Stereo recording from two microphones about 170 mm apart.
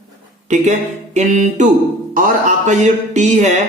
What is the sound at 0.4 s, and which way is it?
A man's voice, 45° right (ahead or behind).